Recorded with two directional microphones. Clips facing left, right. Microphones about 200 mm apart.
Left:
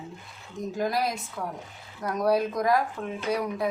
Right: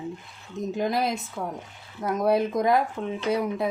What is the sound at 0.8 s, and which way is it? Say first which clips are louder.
A woman's voice: right 1 dB; 20° right (ahead or behind).